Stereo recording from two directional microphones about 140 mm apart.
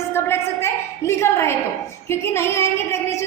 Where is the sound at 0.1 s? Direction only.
20° left (ahead or behind).